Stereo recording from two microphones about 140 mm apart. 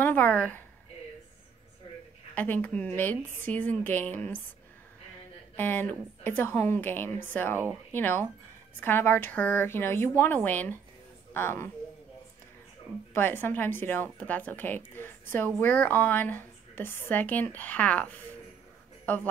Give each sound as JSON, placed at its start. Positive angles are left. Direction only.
{"t": 0.0, "sound": "a woman's voice", "side_deg": 10}
{"t": 2.3, "sound": "a woman's voice", "side_deg": 10}
{"t": 5.6, "sound": "a woman's voice", "side_deg": 15}
{"t": 13.1, "sound": "a woman's voice", "side_deg": 15}